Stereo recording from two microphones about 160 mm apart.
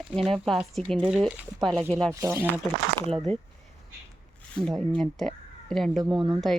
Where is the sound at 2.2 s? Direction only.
15° right (ahead or behind).